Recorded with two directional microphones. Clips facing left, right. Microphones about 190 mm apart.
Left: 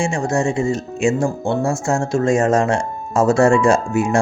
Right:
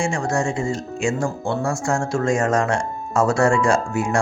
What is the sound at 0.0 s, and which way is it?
Speech, 20° left (ahead or behind).